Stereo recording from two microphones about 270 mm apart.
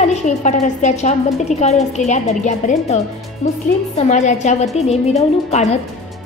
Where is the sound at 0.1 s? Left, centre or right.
Left.